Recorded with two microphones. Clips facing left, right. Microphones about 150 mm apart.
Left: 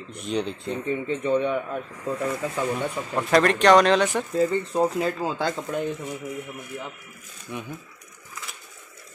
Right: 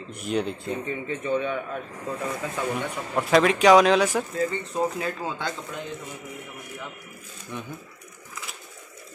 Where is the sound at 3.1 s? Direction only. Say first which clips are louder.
Even; centre (ahead or behind).